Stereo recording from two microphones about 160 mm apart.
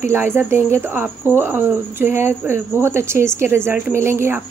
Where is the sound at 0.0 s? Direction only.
15° right (ahead or behind).